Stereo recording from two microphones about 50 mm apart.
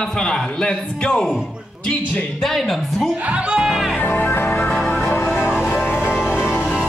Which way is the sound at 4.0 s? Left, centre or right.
Left.